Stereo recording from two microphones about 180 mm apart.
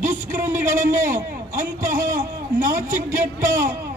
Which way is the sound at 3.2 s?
15° right (ahead or behind).